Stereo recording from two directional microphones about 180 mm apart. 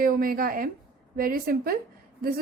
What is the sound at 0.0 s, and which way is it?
A woman's voice, 55° right (ahead or behind).